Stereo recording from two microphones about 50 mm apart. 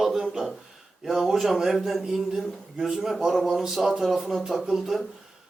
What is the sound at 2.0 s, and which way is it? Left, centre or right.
A man's voice, centre.